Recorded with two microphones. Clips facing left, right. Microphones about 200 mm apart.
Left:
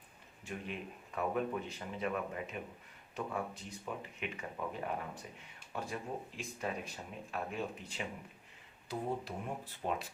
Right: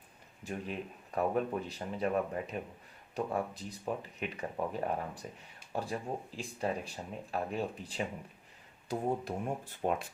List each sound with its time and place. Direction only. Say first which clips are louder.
0.4 s speech: right 4 dB; 40° right (ahead or behind)
8.9 s speech: right 5 dB; 45° right (ahead or behind)